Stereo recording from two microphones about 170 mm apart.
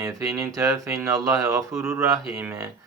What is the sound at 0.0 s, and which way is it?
Speech, 15° right (ahead or behind).